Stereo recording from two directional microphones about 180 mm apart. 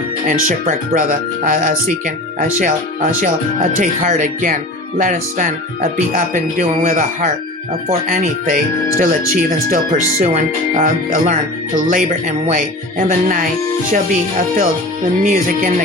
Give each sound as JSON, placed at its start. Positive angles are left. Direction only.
{"t": 0.3, "sound": "speech", "side_deg": -50}